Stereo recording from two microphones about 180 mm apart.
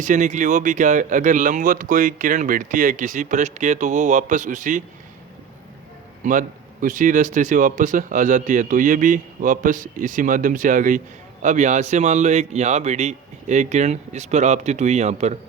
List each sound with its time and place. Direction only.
0.0 s speech: 45° right (ahead or behind)
6.2 s speech: 40° right (ahead or behind)